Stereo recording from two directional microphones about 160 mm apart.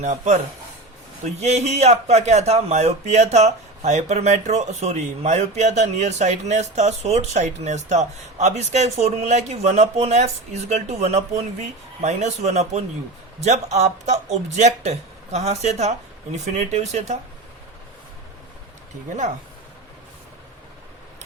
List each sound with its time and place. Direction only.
0.0 s speech: 45° right (ahead or behind)